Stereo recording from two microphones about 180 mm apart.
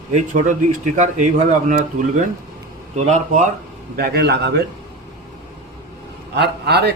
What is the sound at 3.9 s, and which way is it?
Speech, 60° right (ahead or behind).